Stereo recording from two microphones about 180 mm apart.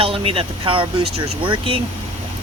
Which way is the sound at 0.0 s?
30° right (ahead or behind).